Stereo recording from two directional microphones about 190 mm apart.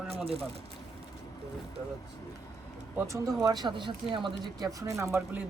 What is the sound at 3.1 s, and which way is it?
Speech, 20° right (ahead or behind).